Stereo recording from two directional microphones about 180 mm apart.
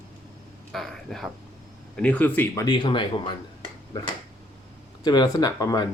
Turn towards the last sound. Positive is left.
turn(degrees=20)  # may be behind; listen again after turning